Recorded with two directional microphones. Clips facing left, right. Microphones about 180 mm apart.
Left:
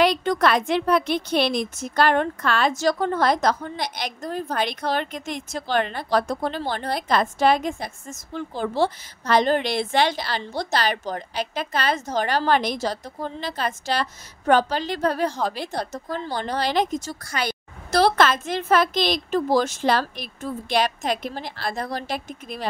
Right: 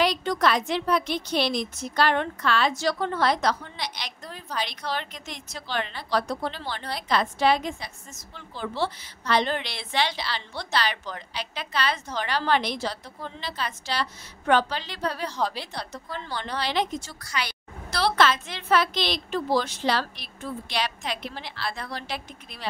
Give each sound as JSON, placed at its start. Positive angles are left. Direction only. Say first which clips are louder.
{"t": 0.0, "sound": "a woman's voice", "louder": "left 4 dB", "side_deg": 55}